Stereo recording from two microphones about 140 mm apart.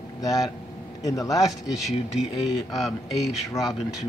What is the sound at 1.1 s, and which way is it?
Speech, 25° left (ahead or behind).